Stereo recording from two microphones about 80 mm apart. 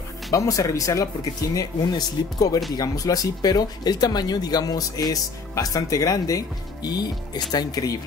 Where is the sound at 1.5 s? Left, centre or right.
Left.